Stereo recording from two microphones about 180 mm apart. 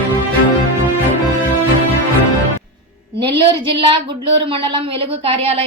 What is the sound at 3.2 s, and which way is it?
A woman's voice, 25° right (ahead or behind).